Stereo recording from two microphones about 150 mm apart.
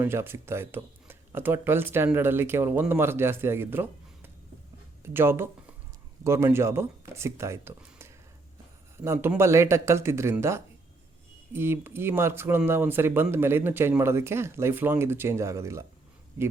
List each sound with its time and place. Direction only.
0.0 s speech: 15° right (ahead or behind)
7.8 s a sound: 15° right (ahead or behind)
9.0 s speech: 15° right (ahead or behind)